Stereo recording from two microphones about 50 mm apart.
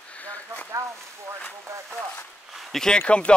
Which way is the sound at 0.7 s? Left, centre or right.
Right.